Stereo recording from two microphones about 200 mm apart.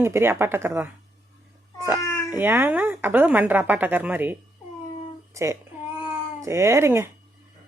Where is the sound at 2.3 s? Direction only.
10° right (ahead or behind).